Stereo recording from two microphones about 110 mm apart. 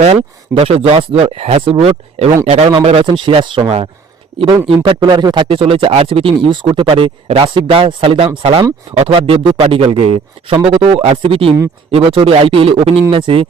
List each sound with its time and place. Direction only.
0.0 s speech: 70° right (ahead or behind)
2.8 s a man's voice: 55° right (ahead or behind)